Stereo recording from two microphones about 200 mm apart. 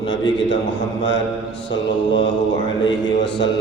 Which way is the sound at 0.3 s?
65° left (ahead or behind).